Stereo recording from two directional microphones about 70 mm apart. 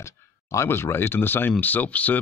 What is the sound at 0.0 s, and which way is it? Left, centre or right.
Speech, left.